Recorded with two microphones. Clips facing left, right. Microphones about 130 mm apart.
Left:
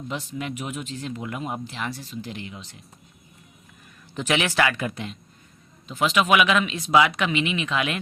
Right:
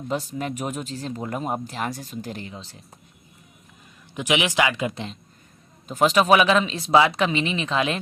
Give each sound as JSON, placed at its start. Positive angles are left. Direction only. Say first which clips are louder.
{"t": 0.1, "sound": "speech", "louder": "right 4 dB", "side_deg": -40}
{"t": 4.1, "sound": "speech", "louder": "right 1 dB", "side_deg": -15}
{"t": 5.9, "sound": "speech", "louder": "right 3 dB", "side_deg": -40}